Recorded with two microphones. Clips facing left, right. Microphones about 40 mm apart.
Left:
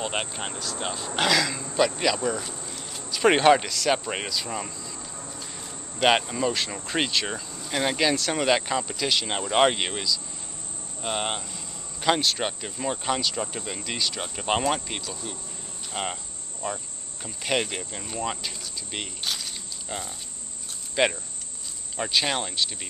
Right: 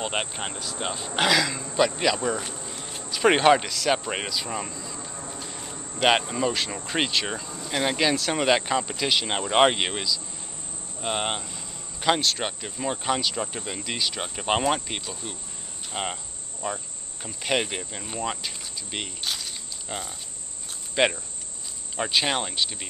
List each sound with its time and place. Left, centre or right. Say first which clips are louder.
0.0 s speech: right 1 dB; centre
2.5 s a sound: right 1 dB; centre
3.0 s speech: even; centre
5.0 s a sound: right 2 dB; centre
5.6 s cricket: right 2 dB; centre
5.9 s speech: even; centre
15.9 s cricket: even; centre
20.9 s speech: right 1 dB; centre